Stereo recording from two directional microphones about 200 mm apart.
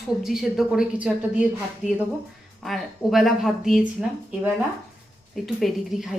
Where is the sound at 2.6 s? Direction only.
Centre (ahead or behind).